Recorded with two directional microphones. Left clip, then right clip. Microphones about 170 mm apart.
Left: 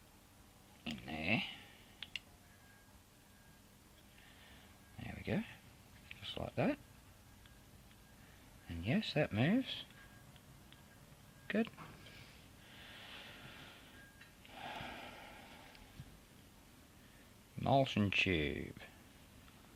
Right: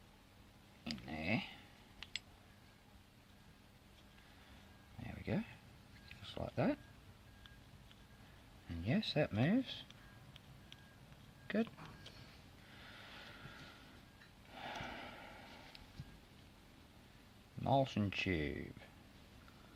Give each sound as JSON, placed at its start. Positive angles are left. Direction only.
{"t": 0.9, "sound": "a sound", "side_deg": 5}
{"t": 5.0, "sound": "a sound", "side_deg": 5}
{"t": 8.7, "sound": "speech", "side_deg": 5}
{"t": 11.4, "sound": "speech", "side_deg": 5}
{"t": 12.8, "sound": "vehicle", "side_deg": 0}
{"t": 14.5, "sound": "snort", "side_deg": 0}
{"t": 17.6, "sound": "speech", "side_deg": 15}